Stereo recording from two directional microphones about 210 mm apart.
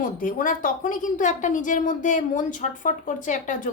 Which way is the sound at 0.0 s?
40° left (ahead or behind).